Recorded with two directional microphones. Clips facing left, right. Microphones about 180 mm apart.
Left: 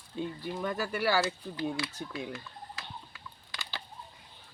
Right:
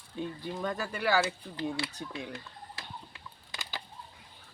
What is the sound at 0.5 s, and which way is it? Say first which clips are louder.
Speech: left 2 dB; 5° left (ahead or behind).